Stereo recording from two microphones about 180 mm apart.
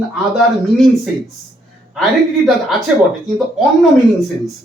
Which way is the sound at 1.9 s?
Centre (ahead or behind).